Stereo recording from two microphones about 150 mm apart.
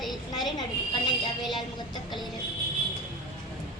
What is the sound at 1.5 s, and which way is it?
Vehicle, 30° left (ahead or behind).